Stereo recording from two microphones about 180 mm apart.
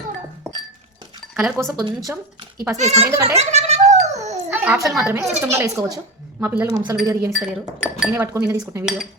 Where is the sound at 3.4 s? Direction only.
35° right (ahead or behind).